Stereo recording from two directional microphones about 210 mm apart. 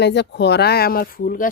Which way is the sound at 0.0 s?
55° left (ahead or behind).